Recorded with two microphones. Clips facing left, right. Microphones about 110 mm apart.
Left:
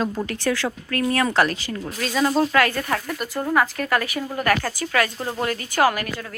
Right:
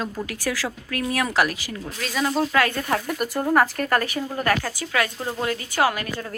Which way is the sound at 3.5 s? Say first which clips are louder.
Right 1 dB; 45° right (ahead or behind).